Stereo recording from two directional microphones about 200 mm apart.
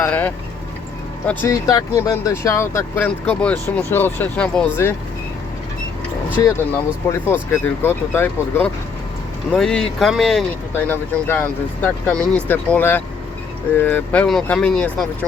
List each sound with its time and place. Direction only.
0.0 s speech: 10° left (ahead or behind)
6.4 s speech: 15° left (ahead or behind)
12.1 s speech: 15° right (ahead or behind)
12.5 s speech: 10° left (ahead or behind)